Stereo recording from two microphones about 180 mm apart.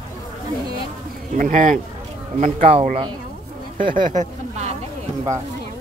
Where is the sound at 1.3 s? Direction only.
45° right (ahead or behind).